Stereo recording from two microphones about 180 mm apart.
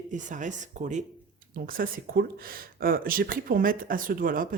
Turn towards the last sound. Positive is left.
turn(degrees=-50)  # may be behind; listen again after turning